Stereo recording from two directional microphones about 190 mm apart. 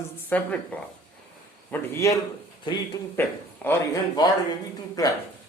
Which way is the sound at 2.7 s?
25° left (ahead or behind).